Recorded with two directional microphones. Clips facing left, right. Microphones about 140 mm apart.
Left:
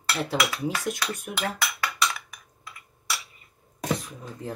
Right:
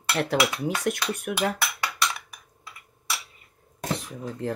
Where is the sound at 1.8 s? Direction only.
Centre (ahead or behind).